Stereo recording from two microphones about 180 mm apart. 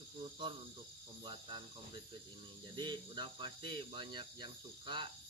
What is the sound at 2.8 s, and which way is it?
Speech, 25° right (ahead or behind).